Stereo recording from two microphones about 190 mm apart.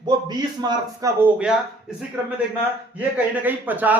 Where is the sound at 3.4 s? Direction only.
10° right (ahead or behind).